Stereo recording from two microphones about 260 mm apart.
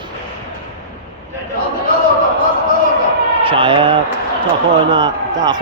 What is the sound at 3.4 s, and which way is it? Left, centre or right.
A man's voice, centre.